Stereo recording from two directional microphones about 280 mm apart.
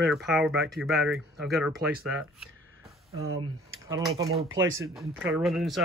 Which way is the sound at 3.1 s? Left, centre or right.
Right.